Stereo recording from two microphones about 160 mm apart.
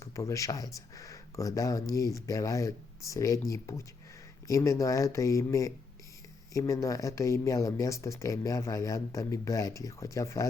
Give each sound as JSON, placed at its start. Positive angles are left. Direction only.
{"t": 0.0, "sound": "speech", "side_deg": 20}